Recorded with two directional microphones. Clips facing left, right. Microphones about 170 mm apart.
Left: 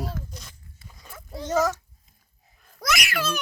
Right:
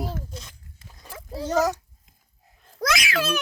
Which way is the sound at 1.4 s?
35° right (ahead or behind).